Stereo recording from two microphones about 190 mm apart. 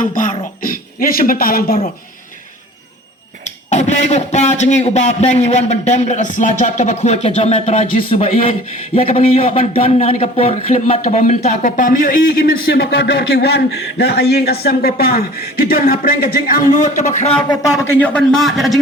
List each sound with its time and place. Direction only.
0.0 s a man's voice: 45° left (ahead or behind)
3.4 s a man's voice: 40° left (ahead or behind)
17.5 s a man's voice: 15° left (ahead or behind); by 18.8 s centre (ahead or behind)